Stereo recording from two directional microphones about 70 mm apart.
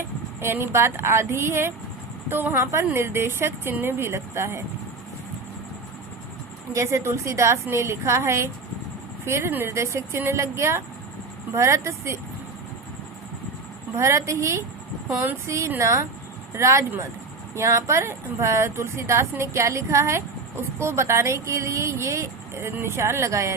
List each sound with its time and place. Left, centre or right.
0.4 s speech: right
6.7 s a woman's voice: right
13.9 s a woman's voice: right